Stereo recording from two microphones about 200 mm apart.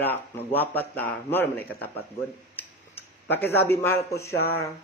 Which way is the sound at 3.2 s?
10° left (ahead or behind).